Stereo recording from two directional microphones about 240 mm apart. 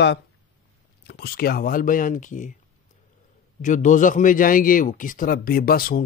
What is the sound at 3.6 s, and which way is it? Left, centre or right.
A man's voice, left.